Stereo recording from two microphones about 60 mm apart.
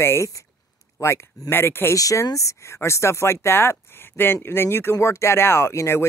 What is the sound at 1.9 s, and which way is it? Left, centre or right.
Speech, left.